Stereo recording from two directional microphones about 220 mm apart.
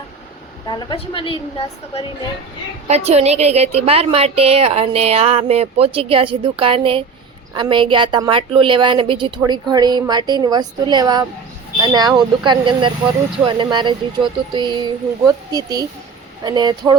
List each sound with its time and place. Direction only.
0.7 s a woman's voice: 20° left (ahead or behind)
2.8 s a woman's voice: 30° right (ahead or behind)